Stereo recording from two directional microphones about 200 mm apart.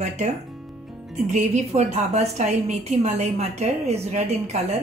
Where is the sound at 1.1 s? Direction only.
35° right (ahead or behind).